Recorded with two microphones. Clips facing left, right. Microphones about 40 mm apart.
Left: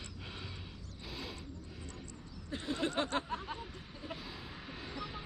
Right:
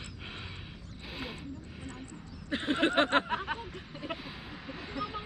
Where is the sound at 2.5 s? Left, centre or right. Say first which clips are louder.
Right 8 dB; right.